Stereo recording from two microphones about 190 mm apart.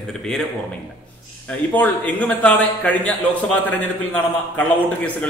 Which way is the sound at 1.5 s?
10° left (ahead or behind).